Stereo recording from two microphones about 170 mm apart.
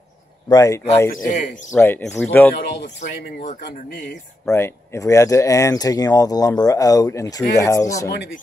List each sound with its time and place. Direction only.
0.5 s speech: 20° left (ahead or behind)
1.1 s speech: 50° left (ahead or behind)
1.8 s speech: 10° left (ahead or behind)
3.1 s speech: 65° left (ahead or behind)
4.5 s speech: 15° left (ahead or behind)